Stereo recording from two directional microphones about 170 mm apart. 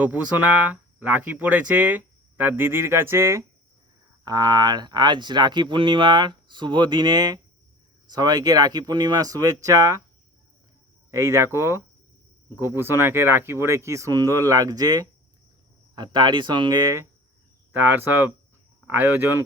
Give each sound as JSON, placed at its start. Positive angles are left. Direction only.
{"t": 0.0, "sound": "speech", "side_deg": -10}
{"t": 11.1, "sound": "speech", "side_deg": -15}